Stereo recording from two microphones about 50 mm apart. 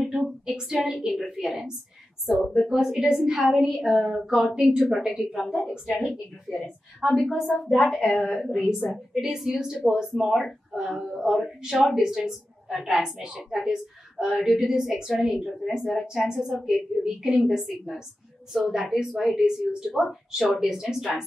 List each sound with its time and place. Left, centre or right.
0.8 s a woman's voice: centre
2.7 s a woman's voice: centre
7.3 s a woman's voice: centre
7.7 s a woman's voice: centre
8.4 s a woman's voice: centre
10.3 s a woman's voice: centre
15.9 s a woman's voice: centre